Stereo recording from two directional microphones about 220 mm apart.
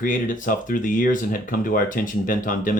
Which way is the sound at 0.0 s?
35° left (ahead or behind).